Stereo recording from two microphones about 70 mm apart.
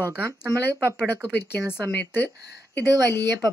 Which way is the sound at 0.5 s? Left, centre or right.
Left.